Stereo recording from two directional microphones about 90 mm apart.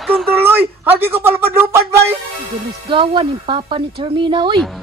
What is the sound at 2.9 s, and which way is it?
Speech, 65° right (ahead or behind).